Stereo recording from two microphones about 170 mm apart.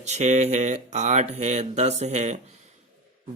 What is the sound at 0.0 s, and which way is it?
Speech, 40° right (ahead or behind).